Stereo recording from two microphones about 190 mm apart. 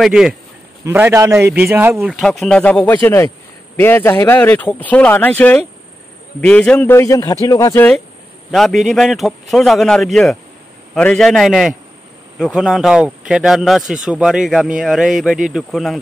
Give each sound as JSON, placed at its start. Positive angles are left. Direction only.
{"t": 0.0, "sound": "a man's voice", "side_deg": -5}
{"t": 2.4, "sound": "speech", "side_deg": 5}
{"t": 8.5, "sound": "a man's voice", "side_deg": 0}